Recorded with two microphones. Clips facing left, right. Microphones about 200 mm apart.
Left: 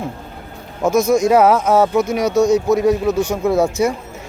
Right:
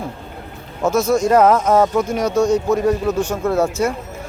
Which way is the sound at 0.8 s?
10° left (ahead or behind).